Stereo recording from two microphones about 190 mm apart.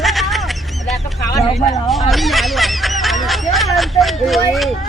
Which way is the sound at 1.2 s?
20° left (ahead or behind).